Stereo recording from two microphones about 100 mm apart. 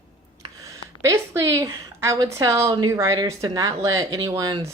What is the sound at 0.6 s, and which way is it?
A woman's voice, 35° right (ahead or behind).